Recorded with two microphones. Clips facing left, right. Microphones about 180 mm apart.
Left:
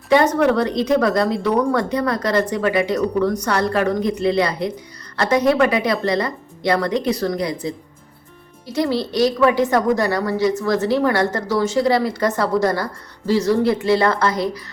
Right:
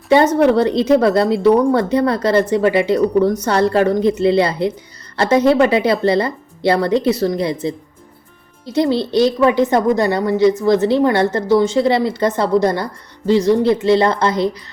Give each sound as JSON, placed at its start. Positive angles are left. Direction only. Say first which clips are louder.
{"t": 0.3, "sound": "a woman's voice", "louder": "right 4 dB", "side_deg": -30}